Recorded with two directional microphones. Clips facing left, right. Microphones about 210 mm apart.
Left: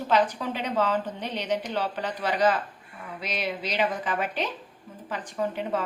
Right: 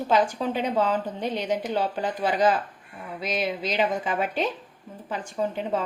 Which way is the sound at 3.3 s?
45° right (ahead or behind).